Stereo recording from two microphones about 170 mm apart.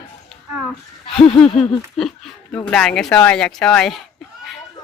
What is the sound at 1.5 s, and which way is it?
Speech, centre (ahead or behind).